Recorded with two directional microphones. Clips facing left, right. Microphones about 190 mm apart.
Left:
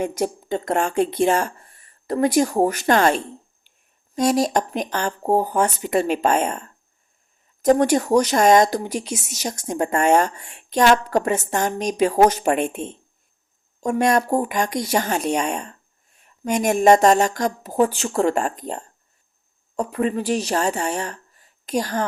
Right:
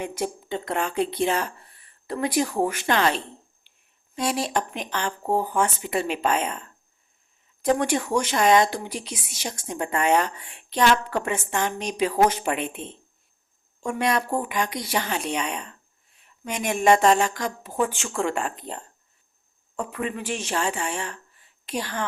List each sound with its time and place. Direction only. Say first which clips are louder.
0.0 s speech: left 6 dB; 40° left (ahead or behind)